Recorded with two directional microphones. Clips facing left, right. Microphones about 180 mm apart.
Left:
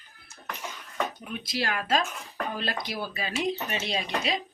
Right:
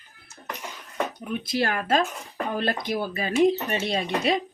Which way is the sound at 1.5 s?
50° right (ahead or behind).